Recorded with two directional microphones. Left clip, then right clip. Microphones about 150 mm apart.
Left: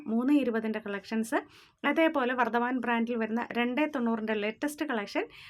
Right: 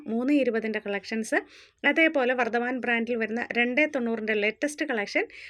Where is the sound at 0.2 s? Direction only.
10° right (ahead or behind).